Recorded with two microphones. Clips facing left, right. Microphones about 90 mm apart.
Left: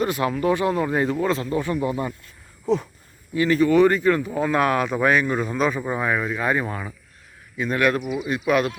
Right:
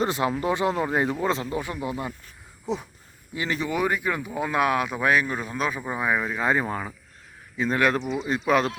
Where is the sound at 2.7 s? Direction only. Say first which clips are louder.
Left 7 dB; 15° right (ahead or behind); by 6.1 s centre (ahead or behind).